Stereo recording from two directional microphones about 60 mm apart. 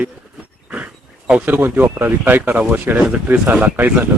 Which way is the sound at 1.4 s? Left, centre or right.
Right.